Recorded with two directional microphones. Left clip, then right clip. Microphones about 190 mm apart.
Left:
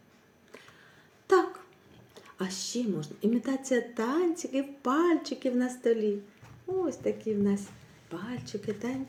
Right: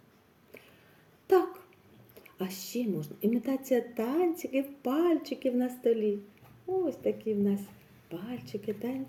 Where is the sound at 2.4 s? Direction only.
35° left (ahead or behind).